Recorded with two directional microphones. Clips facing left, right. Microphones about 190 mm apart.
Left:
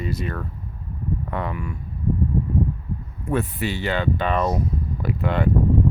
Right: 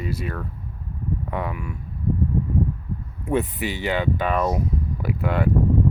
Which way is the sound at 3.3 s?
15° right (ahead or behind).